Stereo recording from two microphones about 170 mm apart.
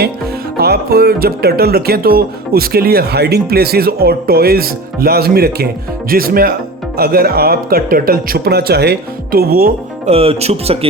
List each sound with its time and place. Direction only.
0.5 s speech: 65° right (ahead or behind)
10.1 s speech: 35° right (ahead or behind)